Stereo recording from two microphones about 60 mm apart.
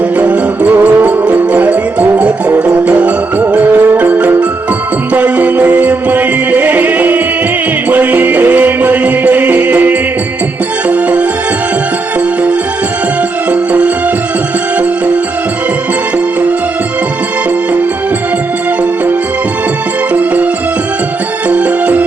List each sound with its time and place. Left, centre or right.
0.2 s music: right
13.5 s music: right
20.1 s music: right
21.5 s music: right